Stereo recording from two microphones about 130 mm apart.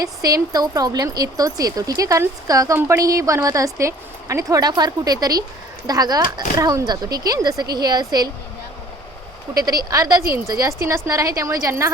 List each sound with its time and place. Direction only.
0.0 s speech: 25° right (ahead or behind)
9.6 s speech: 30° right (ahead or behind)